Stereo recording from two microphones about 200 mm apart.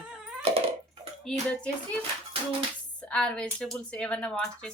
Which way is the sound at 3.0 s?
5° left (ahead or behind).